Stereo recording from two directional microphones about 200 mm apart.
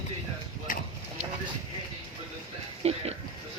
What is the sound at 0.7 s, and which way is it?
Horse, 45° left (ahead or behind).